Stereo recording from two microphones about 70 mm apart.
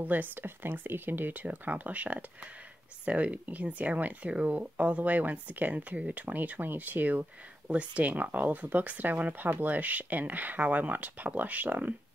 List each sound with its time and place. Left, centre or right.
0.0 s speech: right